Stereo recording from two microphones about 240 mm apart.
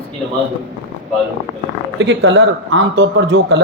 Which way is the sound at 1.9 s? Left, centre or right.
Right.